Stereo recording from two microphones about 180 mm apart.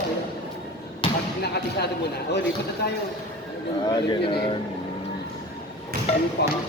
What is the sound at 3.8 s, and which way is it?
Speech, 25° left (ahead or behind).